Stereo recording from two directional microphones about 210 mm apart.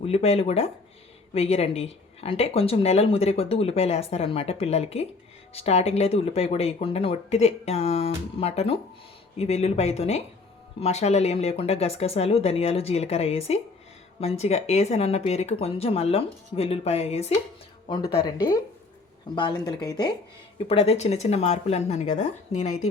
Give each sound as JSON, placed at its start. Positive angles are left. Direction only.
{"t": 0.0, "sound": "speech", "side_deg": 30}